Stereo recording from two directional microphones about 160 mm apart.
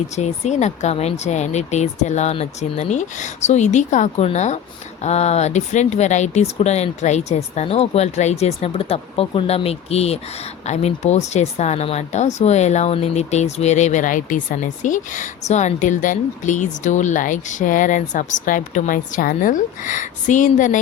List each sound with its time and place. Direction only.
0.2 s speech: 45° left (ahead or behind)